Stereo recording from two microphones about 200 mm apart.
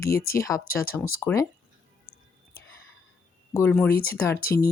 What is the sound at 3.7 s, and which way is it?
Speech, 10° left (ahead or behind).